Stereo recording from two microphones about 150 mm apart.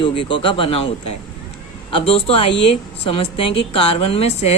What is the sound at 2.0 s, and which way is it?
A woman's voice, 40° left (ahead or behind).